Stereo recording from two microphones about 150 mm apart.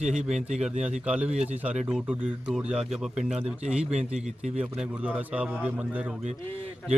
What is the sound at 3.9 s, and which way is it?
Speech, 50° right (ahead or behind).